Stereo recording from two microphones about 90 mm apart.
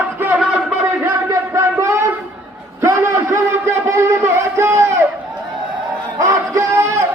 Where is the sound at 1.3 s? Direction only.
35° right (ahead or behind).